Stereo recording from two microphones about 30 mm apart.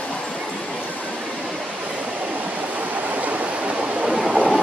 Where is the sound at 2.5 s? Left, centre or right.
Right.